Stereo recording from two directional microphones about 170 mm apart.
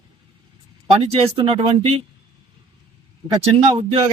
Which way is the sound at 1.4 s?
30° right (ahead or behind).